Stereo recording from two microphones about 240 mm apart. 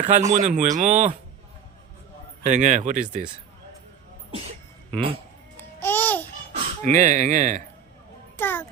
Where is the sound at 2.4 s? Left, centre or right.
Right.